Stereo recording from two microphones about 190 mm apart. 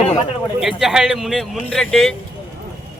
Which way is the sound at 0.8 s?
Centre (ahead or behind).